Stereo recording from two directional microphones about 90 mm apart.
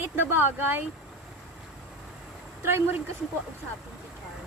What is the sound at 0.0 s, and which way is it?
Speech, 25° right (ahead or behind).